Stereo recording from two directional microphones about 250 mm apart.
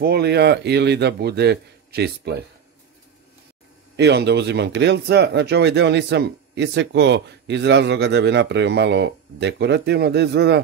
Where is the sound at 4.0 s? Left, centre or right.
Right.